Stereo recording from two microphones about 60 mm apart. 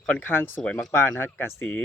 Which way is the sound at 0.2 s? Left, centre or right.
Left.